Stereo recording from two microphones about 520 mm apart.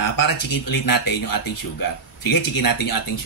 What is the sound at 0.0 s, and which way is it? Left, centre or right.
Speech, left.